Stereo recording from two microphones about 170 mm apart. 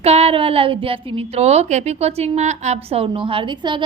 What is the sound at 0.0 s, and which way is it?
A woman's voice, 35° right (ahead or behind).